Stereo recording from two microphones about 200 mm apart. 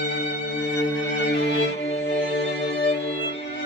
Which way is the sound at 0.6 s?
60° left (ahead or behind).